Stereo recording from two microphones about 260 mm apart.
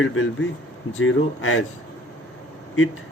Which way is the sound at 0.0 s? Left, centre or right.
Left.